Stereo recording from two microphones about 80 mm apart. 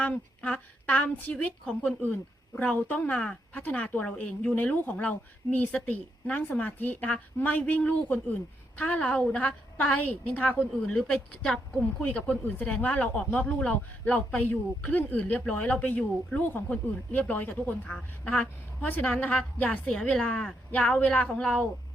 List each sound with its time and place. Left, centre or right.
0.0 s speech: centre
2.6 s speech: centre
11.4 s speech: centre
12.1 s speech: centre